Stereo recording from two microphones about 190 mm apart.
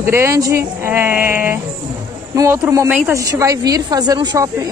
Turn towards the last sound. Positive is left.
turn(degrees=-20)  # may be behind; listen again after turning